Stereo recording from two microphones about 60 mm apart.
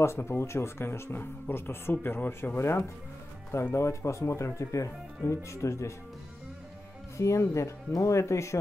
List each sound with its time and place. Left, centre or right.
0.0 s speech: left
3.7 s speech: left
7.2 s speech: left